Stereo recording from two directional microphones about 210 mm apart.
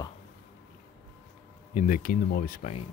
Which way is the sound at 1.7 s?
40° left (ahead or behind).